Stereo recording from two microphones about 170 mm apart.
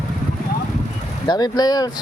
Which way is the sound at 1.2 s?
25° left (ahead or behind).